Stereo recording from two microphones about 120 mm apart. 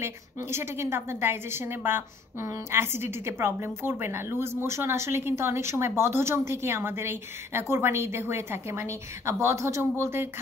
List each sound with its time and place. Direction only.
0.0 s a woman's voice: 20° right (ahead or behind)